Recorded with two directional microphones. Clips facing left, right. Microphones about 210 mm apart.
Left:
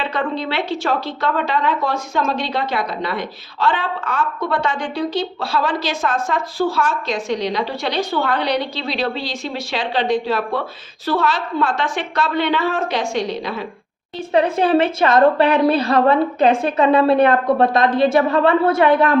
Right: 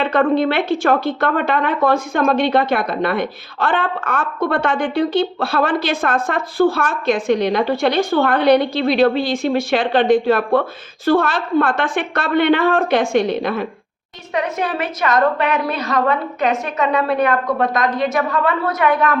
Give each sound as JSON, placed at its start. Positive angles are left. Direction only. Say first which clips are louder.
{"t": 0.0, "sound": "a woman's voice", "louder": "right 7 dB", "side_deg": -50}
{"t": 14.3, "sound": "a woman's voice", "louder": "left 6 dB", "side_deg": 30}